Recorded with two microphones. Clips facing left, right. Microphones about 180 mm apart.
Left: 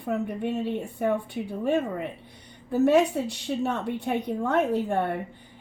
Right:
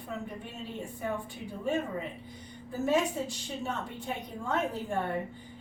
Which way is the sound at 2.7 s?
70° left (ahead or behind).